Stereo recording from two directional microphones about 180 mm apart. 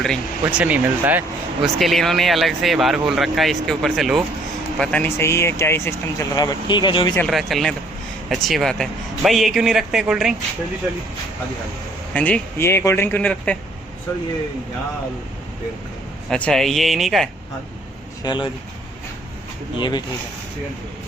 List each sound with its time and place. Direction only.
0.4 s a man's voice: 10° right (ahead or behind); by 7.1 s 25° left (ahead or behind)
7.2 s a man's voice: centre (ahead or behind)
12.1 s speech: 10° left (ahead or behind)
16.3 s a man's voice: 5° left (ahead or behind)
18.2 s speech: 25° left (ahead or behind)